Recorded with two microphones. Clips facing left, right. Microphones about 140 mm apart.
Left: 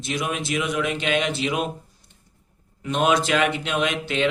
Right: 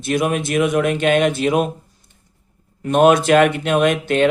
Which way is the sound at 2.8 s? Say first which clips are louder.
Right 8 dB; 50° right (ahead or behind).